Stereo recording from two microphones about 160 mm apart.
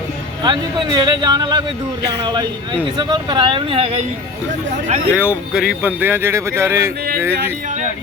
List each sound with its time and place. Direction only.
0.4 s speech: 25° right (ahead or behind)
4.7 s speech: 50° right (ahead or behind)
5.1 s speech: 10° right (ahead or behind)